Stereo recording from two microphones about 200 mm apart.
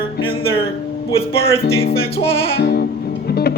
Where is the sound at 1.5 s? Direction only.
30° left (ahead or behind).